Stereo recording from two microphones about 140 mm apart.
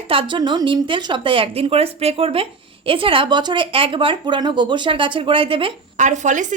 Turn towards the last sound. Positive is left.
turn(degrees=-60)  # may be behind; listen again after turning